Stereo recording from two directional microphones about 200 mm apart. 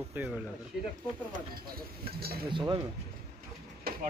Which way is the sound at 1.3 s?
50° right (ahead or behind).